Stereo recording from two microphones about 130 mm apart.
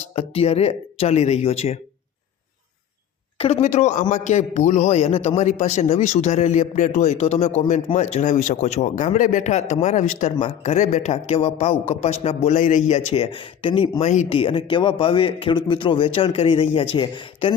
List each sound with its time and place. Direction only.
0.0 s a man's voice: 50° left (ahead or behind)
3.3 s a man's voice: 55° left (ahead or behind)
14.0 s a man's voice: 65° left (ahead or behind)
14.3 s a man's voice: 45° left (ahead or behind)